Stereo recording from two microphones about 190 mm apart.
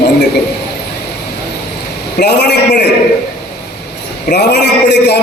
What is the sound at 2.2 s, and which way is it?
Speech, 60° left (ahead or behind).